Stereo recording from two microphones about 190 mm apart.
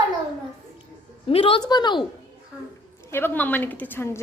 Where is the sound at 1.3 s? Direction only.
30° left (ahead or behind).